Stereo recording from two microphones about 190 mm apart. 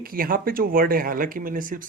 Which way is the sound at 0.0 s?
50° right (ahead or behind).